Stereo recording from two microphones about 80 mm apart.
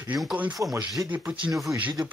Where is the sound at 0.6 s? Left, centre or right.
Right.